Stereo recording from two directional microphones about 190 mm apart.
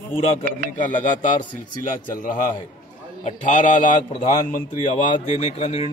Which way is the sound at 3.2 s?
40° left (ahead or behind).